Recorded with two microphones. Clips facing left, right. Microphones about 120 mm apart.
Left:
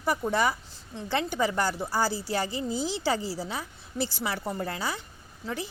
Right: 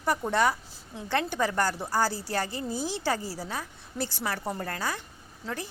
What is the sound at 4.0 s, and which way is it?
Speech, centre (ahead or behind).